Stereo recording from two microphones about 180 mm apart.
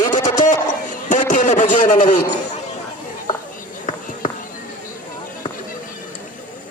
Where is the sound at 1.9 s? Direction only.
25° left (ahead or behind).